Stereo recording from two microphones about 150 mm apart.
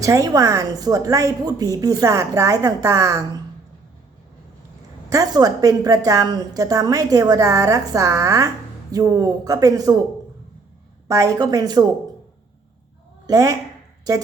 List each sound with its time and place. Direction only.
0.0 s a woman's voice: 20° right (ahead or behind)
5.0 s a woman's voice: 25° right (ahead or behind)
11.1 s a woman's voice: 20° right (ahead or behind)
13.2 s a woman's voice: 20° right (ahead or behind)